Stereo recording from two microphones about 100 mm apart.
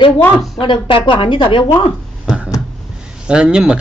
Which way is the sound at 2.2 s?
5° right (ahead or behind).